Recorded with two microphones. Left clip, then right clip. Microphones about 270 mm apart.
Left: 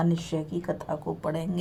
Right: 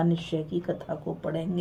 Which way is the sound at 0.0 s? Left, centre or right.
Left.